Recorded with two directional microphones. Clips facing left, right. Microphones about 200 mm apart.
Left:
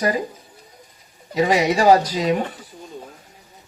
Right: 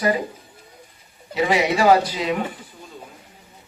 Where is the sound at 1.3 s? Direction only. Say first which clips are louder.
Left 2 dB; 40° left (ahead or behind).